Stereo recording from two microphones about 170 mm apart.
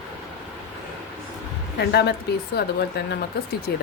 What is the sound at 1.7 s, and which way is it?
Speech, 75° left (ahead or behind).